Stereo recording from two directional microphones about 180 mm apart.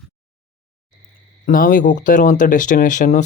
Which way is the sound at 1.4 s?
50° left (ahead or behind).